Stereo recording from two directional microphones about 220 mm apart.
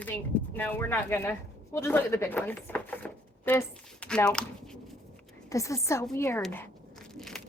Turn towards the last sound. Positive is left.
turn(degrees=0)  # may be behind; listen again after turning